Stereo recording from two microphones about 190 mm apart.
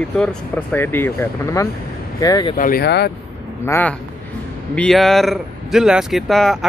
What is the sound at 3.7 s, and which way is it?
A man's voice, 10° left (ahead or behind).